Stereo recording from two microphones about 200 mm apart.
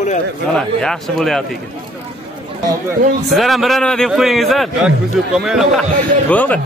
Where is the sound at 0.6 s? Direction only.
5° left (ahead or behind).